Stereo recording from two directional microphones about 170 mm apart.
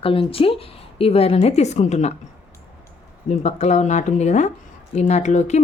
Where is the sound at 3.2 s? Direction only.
40° left (ahead or behind).